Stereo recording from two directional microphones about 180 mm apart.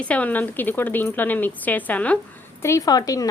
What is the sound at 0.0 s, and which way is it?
A woman's voice, 5° left (ahead or behind).